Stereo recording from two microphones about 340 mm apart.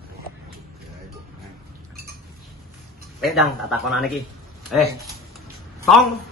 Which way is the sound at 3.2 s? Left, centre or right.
Centre.